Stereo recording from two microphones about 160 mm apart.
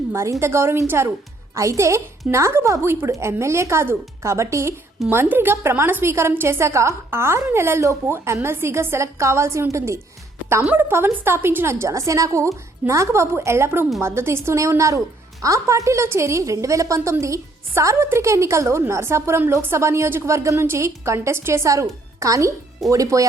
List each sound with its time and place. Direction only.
0.1 s a woman's voice: 15° right (ahead or behind)